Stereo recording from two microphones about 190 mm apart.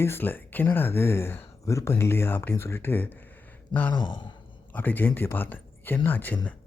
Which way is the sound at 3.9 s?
25° left (ahead or behind).